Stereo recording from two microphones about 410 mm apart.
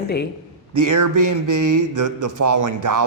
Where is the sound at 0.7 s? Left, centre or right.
Right.